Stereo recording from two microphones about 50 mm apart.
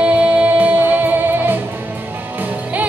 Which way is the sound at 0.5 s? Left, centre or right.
Right.